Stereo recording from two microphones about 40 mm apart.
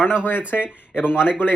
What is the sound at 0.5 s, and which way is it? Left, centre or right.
Speech, left.